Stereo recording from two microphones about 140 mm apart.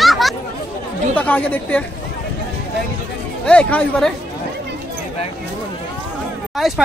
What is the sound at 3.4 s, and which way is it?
Speech, 5° left (ahead or behind).